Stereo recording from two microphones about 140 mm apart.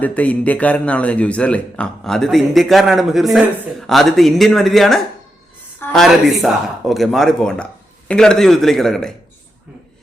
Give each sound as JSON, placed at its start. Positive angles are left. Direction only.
{"t": 0.0, "sound": "speech", "side_deg": 10}